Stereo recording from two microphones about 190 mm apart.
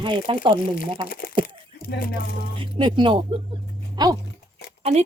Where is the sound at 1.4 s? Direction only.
55° left (ahead or behind).